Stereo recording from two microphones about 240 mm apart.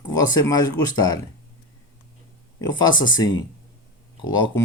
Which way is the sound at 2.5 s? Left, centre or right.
Centre.